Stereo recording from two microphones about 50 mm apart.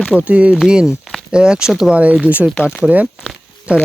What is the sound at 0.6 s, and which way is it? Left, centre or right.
Speech, centre.